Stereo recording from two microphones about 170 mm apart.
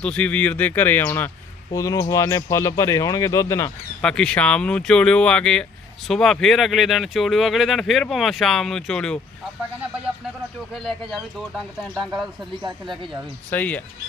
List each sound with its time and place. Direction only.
0.0 s speech: 5° left (ahead or behind)
4.0 s speech: 5° left (ahead or behind)
10.7 s speech: centre (ahead or behind)
13.5 s speech: 10° left (ahead or behind)